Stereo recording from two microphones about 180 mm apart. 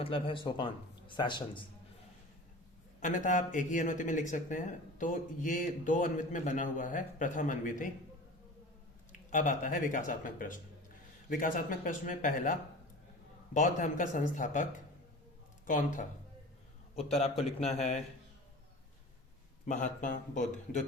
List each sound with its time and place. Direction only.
0.0 s speech: 30° left (ahead or behind)
3.0 s speech: 45° left (ahead or behind)
9.3 s speech: 45° left (ahead or behind)
16.9 s a man's voice: 35° left (ahead or behind)
19.6 s speech: 45° left (ahead or behind)